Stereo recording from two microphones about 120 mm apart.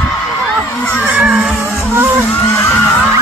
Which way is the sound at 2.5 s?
20° left (ahead or behind).